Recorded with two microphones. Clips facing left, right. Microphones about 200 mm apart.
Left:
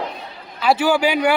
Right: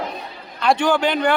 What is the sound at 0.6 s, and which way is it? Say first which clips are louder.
Speech: left 1 dB; 5° left (ahead or behind).